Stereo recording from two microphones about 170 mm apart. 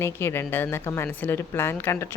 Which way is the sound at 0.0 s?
15° left (ahead or behind).